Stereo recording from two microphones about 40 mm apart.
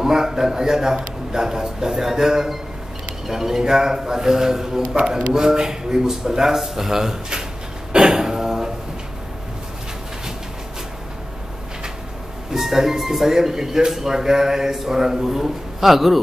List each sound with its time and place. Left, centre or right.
0.0 s a man's voice: centre
7.9 s a sound: centre
12.5 s a man's voice: centre